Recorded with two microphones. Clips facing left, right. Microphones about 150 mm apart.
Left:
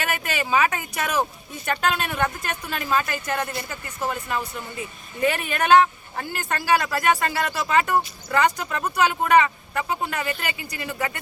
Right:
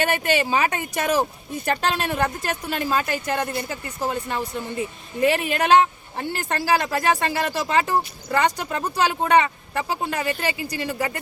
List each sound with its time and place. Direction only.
0.0 s a woman's voice: 30° right (ahead or behind)